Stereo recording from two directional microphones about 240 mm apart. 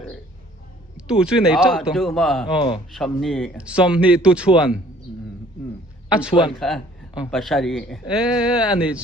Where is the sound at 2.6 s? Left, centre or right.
Left.